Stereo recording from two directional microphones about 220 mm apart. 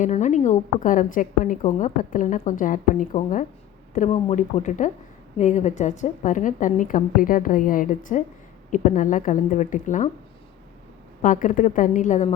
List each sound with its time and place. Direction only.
0.0 s a woman's voice: 35° left (ahead or behind)
11.2 s a woman's voice: 35° left (ahead or behind)